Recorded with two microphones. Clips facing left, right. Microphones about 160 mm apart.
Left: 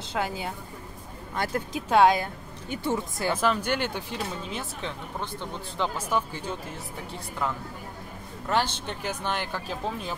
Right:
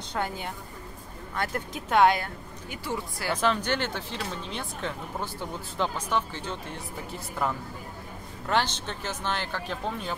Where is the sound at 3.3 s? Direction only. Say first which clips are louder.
Right 1 dB; 5° left (ahead or behind).